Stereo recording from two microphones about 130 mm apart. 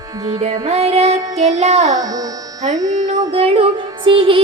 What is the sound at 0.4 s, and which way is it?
Music, 55° right (ahead or behind).